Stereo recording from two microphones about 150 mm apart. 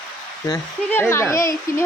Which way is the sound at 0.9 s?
15° left (ahead or behind).